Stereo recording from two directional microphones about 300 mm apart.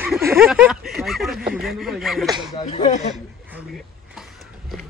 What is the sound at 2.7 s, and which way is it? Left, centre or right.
Speech, left.